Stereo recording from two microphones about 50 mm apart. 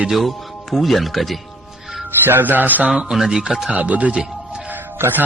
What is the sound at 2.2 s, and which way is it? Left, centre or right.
Music, right.